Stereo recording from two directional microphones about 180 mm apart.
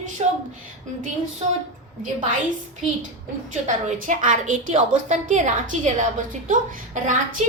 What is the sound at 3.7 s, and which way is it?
A woman's voice, 45° right (ahead or behind).